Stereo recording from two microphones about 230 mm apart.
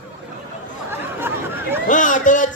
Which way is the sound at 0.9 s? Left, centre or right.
Centre.